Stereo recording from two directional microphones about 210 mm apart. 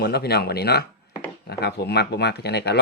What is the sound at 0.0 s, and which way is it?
Speech, 50° left (ahead or behind).